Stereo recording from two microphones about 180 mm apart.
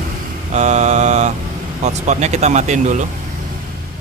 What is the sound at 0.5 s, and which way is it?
Mantra, 40° right (ahead or behind).